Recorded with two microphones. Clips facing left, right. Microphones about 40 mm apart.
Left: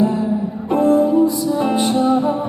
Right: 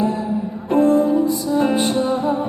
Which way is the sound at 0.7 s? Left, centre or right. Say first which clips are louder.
Even; left.